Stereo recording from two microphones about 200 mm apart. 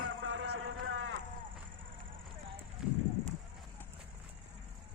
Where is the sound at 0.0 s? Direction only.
70° right (ahead or behind).